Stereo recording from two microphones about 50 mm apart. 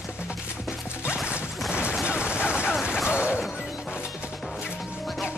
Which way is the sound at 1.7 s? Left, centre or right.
Right.